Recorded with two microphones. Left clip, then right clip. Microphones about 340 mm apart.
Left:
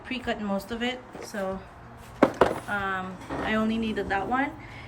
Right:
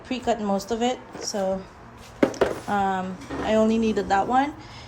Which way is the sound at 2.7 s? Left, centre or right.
Centre.